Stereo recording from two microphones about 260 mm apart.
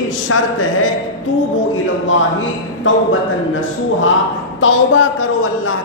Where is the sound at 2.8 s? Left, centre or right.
Left.